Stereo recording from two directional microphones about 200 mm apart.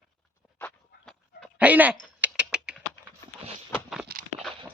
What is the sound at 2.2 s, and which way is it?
Typing, 5° right (ahead or behind).